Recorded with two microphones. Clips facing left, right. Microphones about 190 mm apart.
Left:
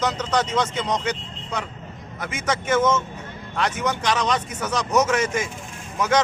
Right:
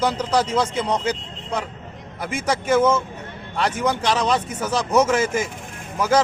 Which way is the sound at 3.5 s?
30° right (ahead or behind).